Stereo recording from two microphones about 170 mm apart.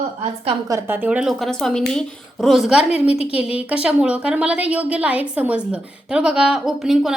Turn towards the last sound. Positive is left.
turn(degrees=0)  # may be behind; listen again after turning